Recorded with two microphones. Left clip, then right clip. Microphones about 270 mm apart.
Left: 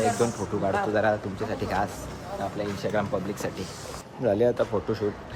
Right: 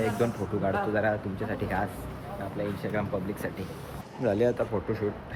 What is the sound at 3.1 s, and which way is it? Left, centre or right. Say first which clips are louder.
Speech: left 3 dB; centre.